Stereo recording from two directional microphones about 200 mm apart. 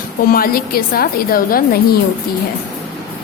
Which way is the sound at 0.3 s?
50° left (ahead or behind).